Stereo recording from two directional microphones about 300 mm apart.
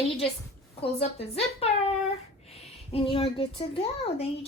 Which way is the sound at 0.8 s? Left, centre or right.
Centre.